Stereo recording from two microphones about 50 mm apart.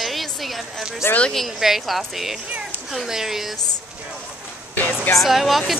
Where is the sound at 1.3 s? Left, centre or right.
Centre.